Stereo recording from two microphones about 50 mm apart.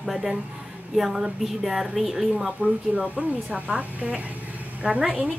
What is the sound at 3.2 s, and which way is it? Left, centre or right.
Speech, right.